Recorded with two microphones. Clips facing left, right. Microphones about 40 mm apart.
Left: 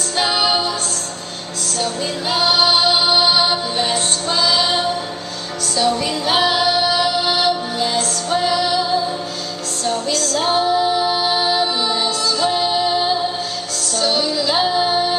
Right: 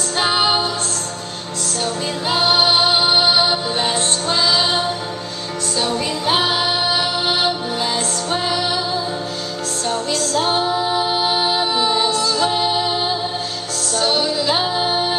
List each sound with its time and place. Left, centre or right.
0.2 s music: centre
1.8 s music: centre
10.3 s music: centre
14.0 s music: right